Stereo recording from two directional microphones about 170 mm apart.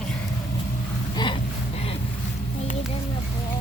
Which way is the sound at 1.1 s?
25° left (ahead or behind).